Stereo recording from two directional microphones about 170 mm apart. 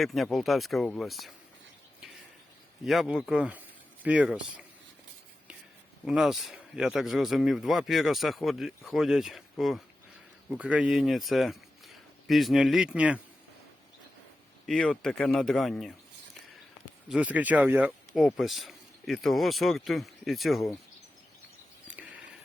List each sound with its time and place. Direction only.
0.0 s speech: centre (ahead or behind)
2.8 s speech: centre (ahead or behind)
6.1 s speech: centre (ahead or behind)
14.7 s speech: 5° left (ahead or behind)
17.1 s speech: 10° right (ahead or behind)
21.8 s cricket: 10° right (ahead or behind)